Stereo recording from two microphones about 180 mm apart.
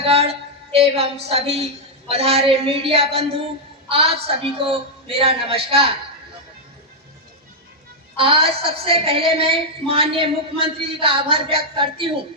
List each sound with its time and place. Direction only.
0.0 s a woman's voice: 35° right (ahead or behind)
8.1 s a woman's voice: 30° right (ahead or behind)